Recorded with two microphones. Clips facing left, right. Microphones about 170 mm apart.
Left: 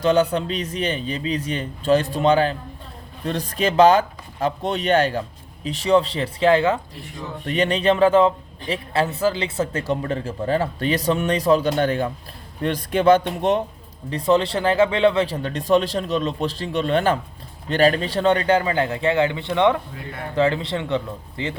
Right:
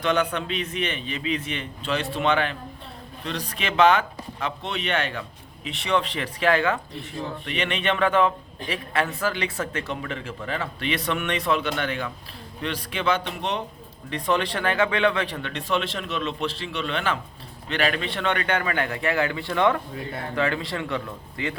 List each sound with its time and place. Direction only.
0.0 s a man's voice: 35° left (ahead or behind)
7.4 s speech: 40° left (ahead or behind)
14.1 s a man's voice: 30° left (ahead or behind)